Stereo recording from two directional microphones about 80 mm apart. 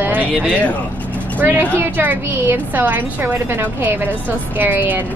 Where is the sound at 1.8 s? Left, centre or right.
Right.